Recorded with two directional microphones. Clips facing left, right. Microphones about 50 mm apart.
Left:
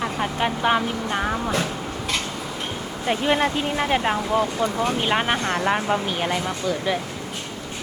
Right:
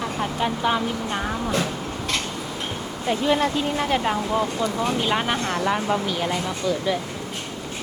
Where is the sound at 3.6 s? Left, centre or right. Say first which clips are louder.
Left 1 dB; left.